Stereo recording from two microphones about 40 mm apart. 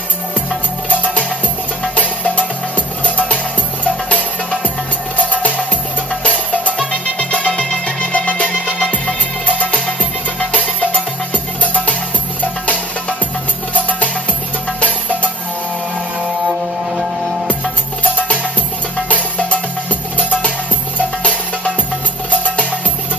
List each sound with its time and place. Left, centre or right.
2.0 s music: left
6.2 s music: left
10.5 s music: left
13.8 s music: left
19.0 s music: left
21.2 s music: left